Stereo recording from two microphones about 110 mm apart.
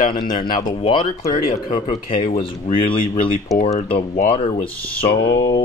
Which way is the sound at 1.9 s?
80° left.